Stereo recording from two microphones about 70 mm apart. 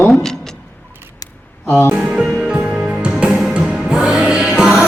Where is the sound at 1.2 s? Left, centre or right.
Left.